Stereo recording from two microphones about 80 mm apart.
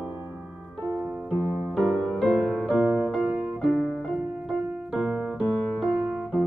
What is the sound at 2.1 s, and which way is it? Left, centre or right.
Music, centre.